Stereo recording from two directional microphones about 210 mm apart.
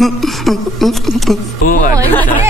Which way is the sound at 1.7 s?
40° left (ahead or behind).